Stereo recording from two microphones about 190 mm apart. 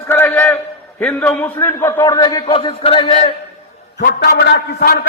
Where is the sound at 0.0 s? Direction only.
10° left (ahead or behind); by 3.3 s 30° left (ahead or behind).